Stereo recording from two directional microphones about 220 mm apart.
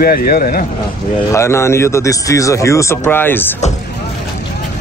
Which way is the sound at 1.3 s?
10° left (ahead or behind).